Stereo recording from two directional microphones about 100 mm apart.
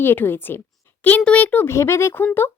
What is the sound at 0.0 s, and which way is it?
Speech, 20° left (ahead or behind).